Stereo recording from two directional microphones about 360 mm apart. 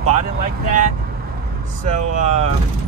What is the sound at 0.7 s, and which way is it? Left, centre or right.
Speech, right.